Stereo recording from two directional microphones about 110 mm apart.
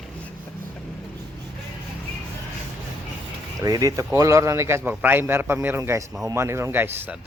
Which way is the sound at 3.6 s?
30° right (ahead or behind).